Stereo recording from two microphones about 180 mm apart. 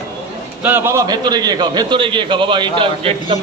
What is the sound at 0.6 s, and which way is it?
A man's voice, 10° right (ahead or behind).